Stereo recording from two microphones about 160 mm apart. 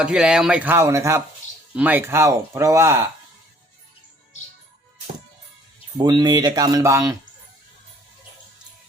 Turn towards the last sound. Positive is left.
turn(degrees=-20)  # may be behind; listen again after turning